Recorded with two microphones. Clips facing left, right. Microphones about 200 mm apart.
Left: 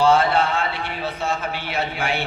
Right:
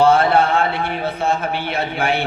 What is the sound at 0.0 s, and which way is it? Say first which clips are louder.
A man's voice: right 3 dB; 55° right (ahead or behind).